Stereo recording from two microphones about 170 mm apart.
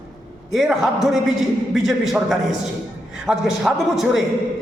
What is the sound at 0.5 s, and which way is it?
A man's voice, centre (ahead or behind).